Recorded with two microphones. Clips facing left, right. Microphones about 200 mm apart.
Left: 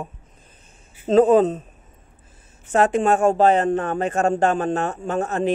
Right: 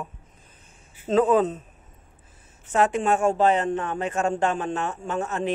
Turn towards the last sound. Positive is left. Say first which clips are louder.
# left 4 dB
turn(degrees=50)  # may be behind; listen again after turning